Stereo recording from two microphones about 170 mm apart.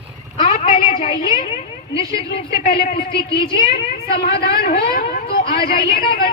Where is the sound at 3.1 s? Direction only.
30° left (ahead or behind).